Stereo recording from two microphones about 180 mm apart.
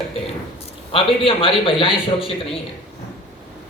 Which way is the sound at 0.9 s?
30° left (ahead or behind).